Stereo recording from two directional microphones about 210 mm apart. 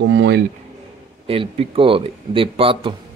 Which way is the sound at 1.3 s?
25° right (ahead or behind).